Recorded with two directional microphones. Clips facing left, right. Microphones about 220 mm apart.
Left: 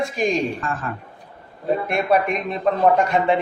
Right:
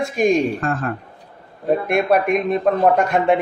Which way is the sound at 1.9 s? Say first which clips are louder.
Right 3 dB; 50° right (ahead or behind).